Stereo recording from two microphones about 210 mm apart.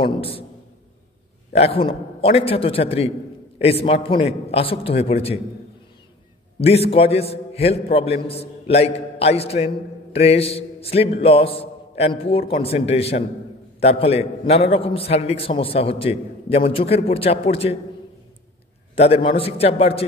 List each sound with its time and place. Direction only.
0.0 s a man's voice: 25° left (ahead or behind)
1.5 s a man's voice: 30° left (ahead or behind)
6.6 s a man's voice: 30° left (ahead or behind)
18.9 s a man's voice: 30° left (ahead or behind)